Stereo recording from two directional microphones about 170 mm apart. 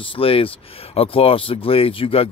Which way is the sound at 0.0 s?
30° left (ahead or behind).